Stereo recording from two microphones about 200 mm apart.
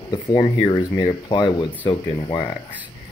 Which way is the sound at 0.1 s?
20° left (ahead or behind).